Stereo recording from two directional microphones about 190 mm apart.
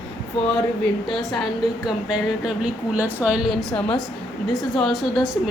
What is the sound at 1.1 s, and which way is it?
Speech, centre (ahead or behind).